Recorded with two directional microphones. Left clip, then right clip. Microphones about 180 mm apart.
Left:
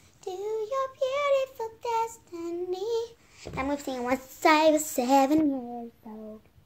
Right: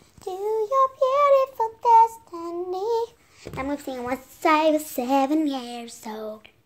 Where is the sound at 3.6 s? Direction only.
5° right (ahead or behind).